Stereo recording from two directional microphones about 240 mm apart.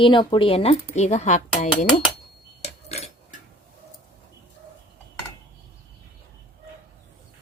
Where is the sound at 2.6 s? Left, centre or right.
Left.